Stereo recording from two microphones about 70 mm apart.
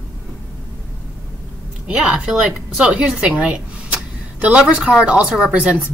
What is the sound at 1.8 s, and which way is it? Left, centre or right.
A woman's voice, centre.